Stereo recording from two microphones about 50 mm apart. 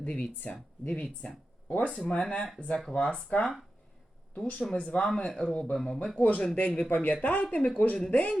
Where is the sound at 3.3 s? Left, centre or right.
Left.